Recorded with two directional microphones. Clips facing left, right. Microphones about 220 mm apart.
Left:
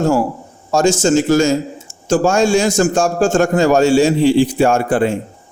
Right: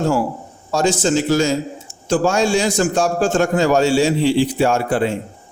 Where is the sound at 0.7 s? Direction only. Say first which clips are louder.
Left 4 dB; 45° left (ahead or behind).